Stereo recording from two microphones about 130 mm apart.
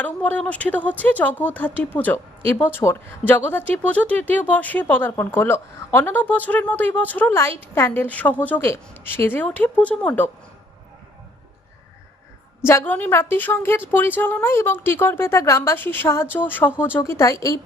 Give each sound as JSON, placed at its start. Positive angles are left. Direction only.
{"t": 0.0, "sound": "speech", "side_deg": 10}
{"t": 12.6, "sound": "a woman's voice", "side_deg": 15}